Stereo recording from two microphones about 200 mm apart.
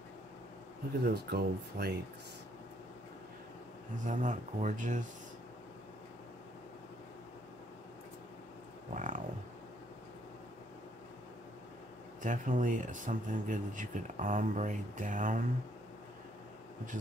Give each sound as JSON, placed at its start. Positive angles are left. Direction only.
{"t": 1.0, "sound": "speech", "side_deg": -50}
{"t": 4.0, "sound": "speech", "side_deg": -40}
{"t": 8.9, "sound": "a sound", "side_deg": -40}
{"t": 12.2, "sound": "speech", "side_deg": -40}